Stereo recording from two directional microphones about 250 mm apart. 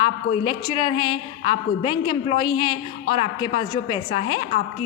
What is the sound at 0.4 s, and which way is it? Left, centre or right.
A woman's voice, centre.